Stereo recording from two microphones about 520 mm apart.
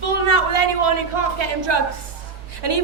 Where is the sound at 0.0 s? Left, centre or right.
Right.